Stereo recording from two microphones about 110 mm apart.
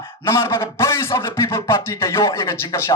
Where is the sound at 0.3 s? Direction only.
25° left (ahead or behind).